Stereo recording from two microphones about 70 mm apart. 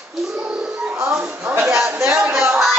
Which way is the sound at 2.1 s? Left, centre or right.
Centre.